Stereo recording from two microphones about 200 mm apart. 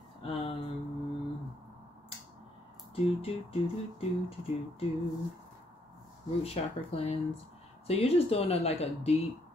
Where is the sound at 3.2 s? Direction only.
30° left (ahead or behind).